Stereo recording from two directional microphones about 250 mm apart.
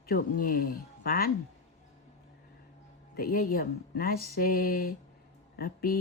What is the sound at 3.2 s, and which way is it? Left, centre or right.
Speech, left.